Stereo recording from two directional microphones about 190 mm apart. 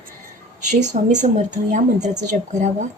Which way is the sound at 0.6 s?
40° right (ahead or behind).